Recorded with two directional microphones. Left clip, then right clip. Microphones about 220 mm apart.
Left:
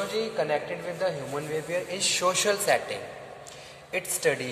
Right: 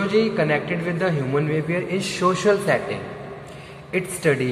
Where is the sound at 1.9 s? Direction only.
25° left (ahead or behind).